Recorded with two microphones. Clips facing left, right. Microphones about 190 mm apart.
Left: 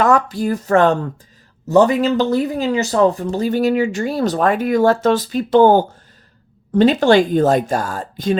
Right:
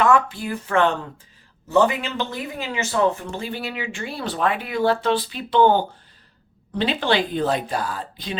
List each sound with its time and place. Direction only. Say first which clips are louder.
0.0 s speech: left 3 dB; 40° left (ahead or behind)